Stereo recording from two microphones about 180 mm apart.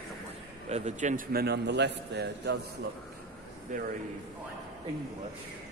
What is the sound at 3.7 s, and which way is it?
Speech, 45° right (ahead or behind).